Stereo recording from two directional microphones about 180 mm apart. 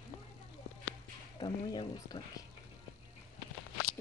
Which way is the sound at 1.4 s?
25° left (ahead or behind).